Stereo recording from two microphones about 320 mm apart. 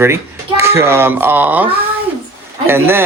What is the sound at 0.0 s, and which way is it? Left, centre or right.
Speech, centre.